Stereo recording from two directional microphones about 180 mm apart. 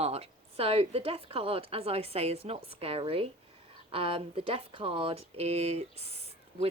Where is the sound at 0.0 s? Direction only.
35° right (ahead or behind).